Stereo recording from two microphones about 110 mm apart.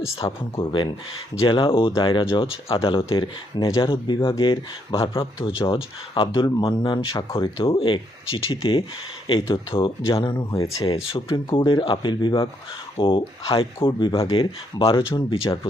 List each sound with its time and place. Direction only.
0.2 s speech: 55° left (ahead or behind)